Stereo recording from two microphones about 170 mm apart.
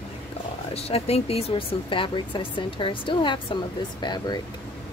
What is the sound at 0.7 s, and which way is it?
Speech, 35° left (ahead or behind).